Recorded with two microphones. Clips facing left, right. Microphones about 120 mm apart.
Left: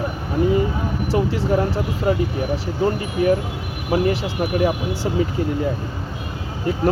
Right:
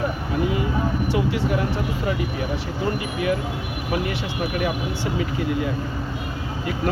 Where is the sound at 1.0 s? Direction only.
35° left (ahead or behind).